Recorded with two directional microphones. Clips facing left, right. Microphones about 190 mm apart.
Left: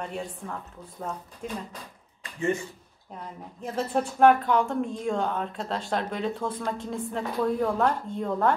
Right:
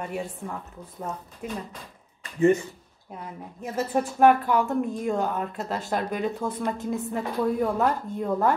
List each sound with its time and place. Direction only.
0.0 s a woman's voice: 5° right (ahead or behind)
3.2 s a woman's voice: 5° right (ahead or behind)